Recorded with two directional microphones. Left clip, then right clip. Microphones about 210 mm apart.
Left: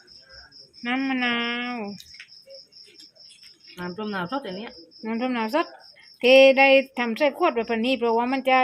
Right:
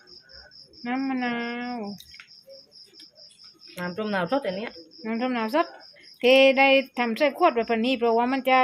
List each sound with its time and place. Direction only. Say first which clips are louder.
0.8 s speech: left 3 dB; centre (ahead or behind)
3.8 s speech: right 3 dB; 45° right (ahead or behind)
5.0 s speech: left 1 dB; 5° left (ahead or behind)